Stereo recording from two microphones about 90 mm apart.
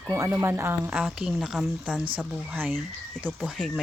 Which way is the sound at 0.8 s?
10° right (ahead or behind).